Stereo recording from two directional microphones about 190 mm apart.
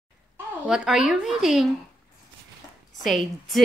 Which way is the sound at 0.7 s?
5° right (ahead or behind).